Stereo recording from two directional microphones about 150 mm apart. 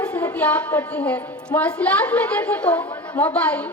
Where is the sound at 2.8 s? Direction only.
30° left (ahead or behind).